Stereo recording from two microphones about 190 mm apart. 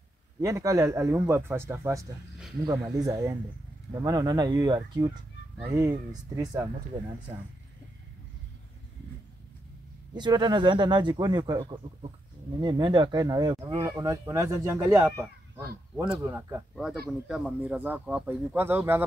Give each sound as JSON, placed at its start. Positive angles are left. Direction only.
{"t": 0.4, "sound": "speech", "side_deg": -15}
{"t": 10.1, "sound": "speech", "side_deg": -25}